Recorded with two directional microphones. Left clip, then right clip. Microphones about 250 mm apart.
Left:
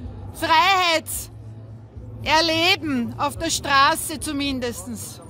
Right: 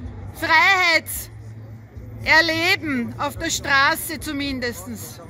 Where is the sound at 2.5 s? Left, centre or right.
Centre.